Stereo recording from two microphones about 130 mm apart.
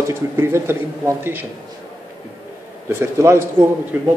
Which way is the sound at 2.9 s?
20° right (ahead or behind).